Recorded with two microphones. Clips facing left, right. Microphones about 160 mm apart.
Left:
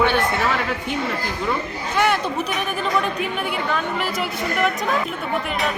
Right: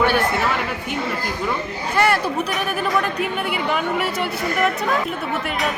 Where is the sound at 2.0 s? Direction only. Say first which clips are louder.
Right 1 dB; 5° right (ahead or behind).